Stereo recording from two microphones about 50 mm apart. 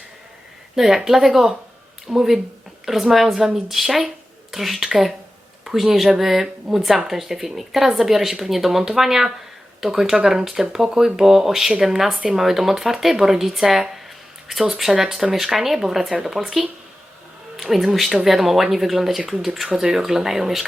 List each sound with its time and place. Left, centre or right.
0.8 s speech: centre
12.4 s speech: centre